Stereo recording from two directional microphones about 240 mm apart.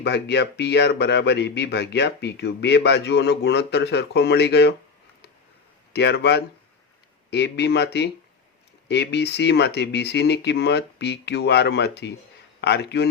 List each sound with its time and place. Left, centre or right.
0.0 s a man's voice: left
5.9 s a man's voice: left